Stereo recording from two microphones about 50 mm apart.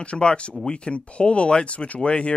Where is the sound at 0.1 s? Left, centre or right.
Centre.